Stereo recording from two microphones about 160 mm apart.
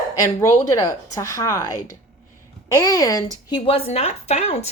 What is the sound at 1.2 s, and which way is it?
Speech, 20° left (ahead or behind).